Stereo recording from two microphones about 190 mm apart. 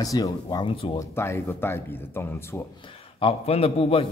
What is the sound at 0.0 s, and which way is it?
Speech, 20° left (ahead or behind).